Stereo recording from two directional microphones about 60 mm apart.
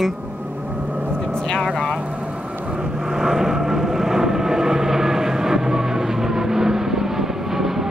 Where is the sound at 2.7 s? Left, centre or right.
Centre.